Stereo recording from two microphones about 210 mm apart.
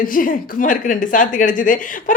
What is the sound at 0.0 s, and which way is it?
A woman's voice, 40° left (ahead or behind).